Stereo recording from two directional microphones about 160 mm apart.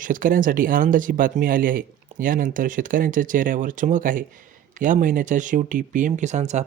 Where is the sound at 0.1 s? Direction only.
60° right (ahead or behind).